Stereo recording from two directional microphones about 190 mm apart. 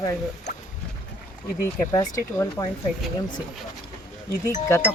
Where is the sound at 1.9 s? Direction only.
15° left (ahead or behind).